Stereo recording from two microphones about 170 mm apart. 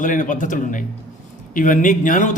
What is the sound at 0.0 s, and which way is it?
Speech, 50° left (ahead or behind).